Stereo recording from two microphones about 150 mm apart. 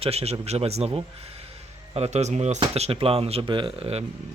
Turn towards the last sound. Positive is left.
turn(degrees=-40)  # may be behind; listen again after turning